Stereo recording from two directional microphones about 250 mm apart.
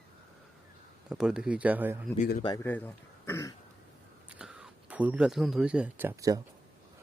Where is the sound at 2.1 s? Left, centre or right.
Left.